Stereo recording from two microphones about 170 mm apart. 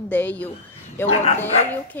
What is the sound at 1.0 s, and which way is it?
Speech, 40° left (ahead or behind).